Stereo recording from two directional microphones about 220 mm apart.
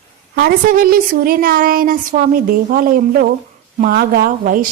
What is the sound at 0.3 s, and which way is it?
A woman's voice, 40° right (ahead or behind).